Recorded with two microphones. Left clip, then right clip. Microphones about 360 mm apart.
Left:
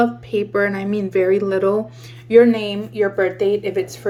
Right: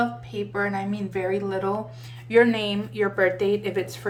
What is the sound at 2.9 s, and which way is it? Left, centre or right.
Speech, centre.